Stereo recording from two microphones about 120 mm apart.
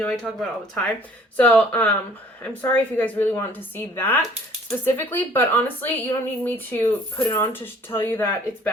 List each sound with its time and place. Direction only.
0.0 s a woman's voice: 5° left (ahead or behind)